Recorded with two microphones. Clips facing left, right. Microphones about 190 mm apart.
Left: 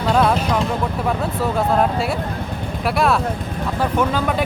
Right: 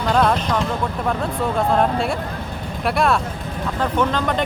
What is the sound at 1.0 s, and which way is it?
Speech, 5° left (ahead or behind).